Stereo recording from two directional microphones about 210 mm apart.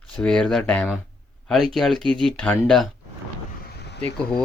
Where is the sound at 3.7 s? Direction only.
55° left (ahead or behind).